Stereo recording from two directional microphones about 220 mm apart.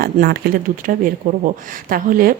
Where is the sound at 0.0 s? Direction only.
45° right (ahead or behind).